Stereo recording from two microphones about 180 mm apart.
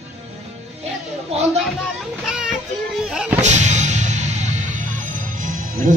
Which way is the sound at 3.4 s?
40° right (ahead or behind).